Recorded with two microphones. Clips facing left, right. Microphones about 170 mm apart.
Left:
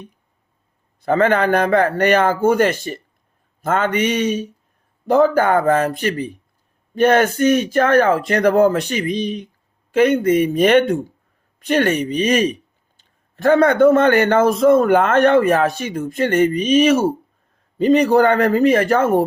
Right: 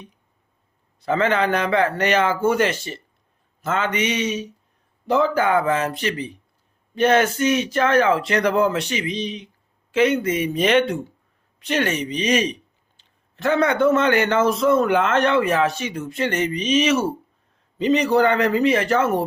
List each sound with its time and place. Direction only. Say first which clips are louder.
1.0 s a man's voice: left 4 dB; 50° left (ahead or behind)